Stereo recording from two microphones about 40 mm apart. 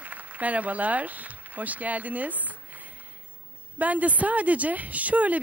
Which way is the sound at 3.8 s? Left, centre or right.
Right.